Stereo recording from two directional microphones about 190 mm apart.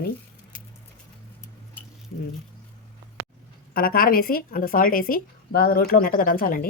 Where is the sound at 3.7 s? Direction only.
50° left (ahead or behind).